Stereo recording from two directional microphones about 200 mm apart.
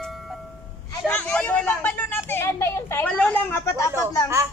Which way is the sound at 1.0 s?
10° left (ahead or behind).